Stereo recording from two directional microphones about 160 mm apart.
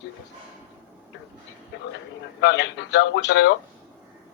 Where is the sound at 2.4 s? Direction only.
90° left.